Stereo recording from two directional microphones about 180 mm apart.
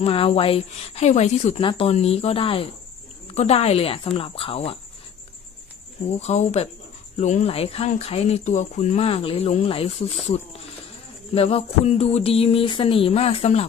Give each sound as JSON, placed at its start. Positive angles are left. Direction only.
{"t": 0.0, "sound": "speech", "side_deg": 30}
{"t": 6.1, "sound": "speech", "side_deg": 40}
{"t": 11.3, "sound": "speech", "side_deg": 35}